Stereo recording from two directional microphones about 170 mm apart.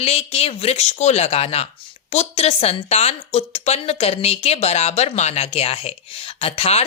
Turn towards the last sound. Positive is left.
turn(degrees=40)  # may be behind; listen again after turning